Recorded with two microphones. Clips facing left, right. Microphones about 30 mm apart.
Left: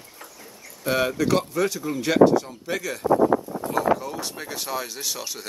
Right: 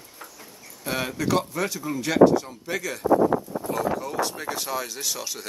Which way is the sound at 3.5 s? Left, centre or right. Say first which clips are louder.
Even; left.